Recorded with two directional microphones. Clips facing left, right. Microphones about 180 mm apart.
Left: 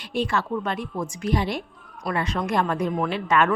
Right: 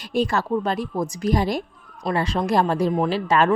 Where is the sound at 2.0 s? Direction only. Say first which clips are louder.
Right 3 dB; 30° right (ahead or behind).